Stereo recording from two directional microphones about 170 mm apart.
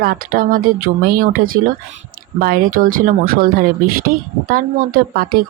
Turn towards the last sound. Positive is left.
turn(degrees=-60)  # may be behind; listen again after turning